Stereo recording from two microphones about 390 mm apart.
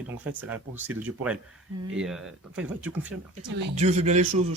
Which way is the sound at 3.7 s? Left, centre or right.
Centre.